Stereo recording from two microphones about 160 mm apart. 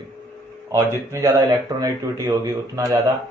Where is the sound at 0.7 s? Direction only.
20° right (ahead or behind).